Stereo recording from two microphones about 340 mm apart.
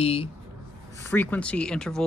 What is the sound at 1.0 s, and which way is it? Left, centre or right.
Speech, centre.